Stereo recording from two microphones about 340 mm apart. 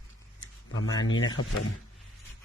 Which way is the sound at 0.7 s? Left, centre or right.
Left.